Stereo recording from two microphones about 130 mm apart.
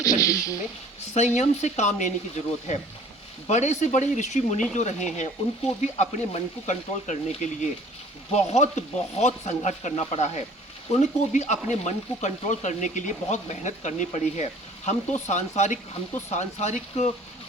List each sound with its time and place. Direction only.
0.0 s speech: 25° left (ahead or behind)
1.1 s speech: 65° left (ahead or behind)
3.4 s frying: 60° left (ahead or behind)
4.7 s speech: 65° left (ahead or behind)
11.0 s frying: 65° left (ahead or behind)
14.8 s speech: 65° left (ahead or behind)